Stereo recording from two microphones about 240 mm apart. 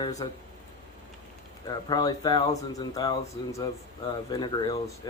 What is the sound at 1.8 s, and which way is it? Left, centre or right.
Speech, centre.